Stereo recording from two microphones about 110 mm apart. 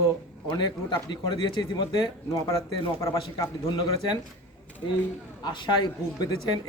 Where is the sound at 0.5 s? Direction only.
45° left (ahead or behind).